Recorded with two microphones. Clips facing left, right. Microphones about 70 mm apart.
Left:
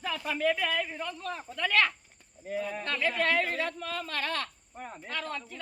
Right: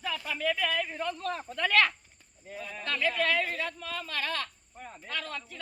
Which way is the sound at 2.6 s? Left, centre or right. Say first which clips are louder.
Left 2 dB; left.